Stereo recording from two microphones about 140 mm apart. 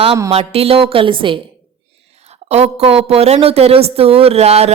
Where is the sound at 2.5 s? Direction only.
50° right (ahead or behind).